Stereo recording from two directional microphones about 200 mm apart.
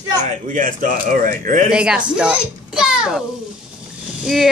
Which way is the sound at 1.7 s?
5° right (ahead or behind).